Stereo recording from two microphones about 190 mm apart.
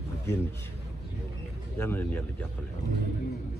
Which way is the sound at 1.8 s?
10° left (ahead or behind).